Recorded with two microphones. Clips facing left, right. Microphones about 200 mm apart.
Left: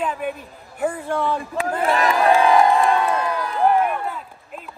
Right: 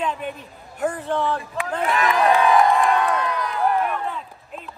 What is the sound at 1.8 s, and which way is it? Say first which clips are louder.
Crowd: left 1 dB; 35° left (ahead or behind).